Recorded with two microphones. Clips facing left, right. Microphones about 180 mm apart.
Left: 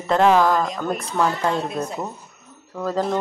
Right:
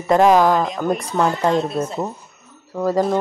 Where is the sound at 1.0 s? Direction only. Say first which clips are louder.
Right 1 dB; 15° right (ahead or behind).